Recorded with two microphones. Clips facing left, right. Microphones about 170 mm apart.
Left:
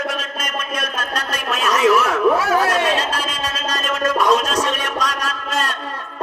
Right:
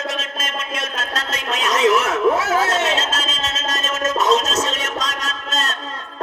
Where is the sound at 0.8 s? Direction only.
25° right (ahead or behind).